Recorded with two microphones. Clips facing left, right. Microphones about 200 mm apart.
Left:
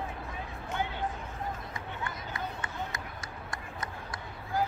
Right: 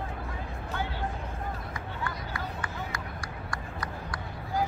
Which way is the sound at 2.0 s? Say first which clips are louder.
Right 2 dB; 20° left (ahead or behind).